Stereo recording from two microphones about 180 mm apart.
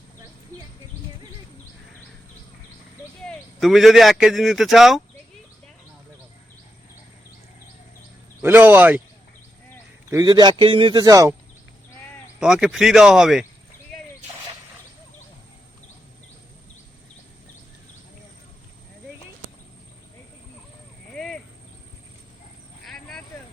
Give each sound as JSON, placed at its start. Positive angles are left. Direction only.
{"t": 0.5, "sound": "a sound", "side_deg": 10}
{"t": 3.2, "sound": "speech", "side_deg": 0}
{"t": 8.4, "sound": "speech", "side_deg": -10}
{"t": 10.1, "sound": "a man's voice", "side_deg": -20}
{"t": 12.4, "sound": "speech", "side_deg": -5}
{"t": 21.1, "sound": "a sound", "side_deg": 5}
{"t": 22.9, "sound": "vehicle", "side_deg": 5}